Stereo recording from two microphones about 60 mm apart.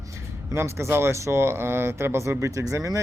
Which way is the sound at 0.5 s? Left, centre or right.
Right.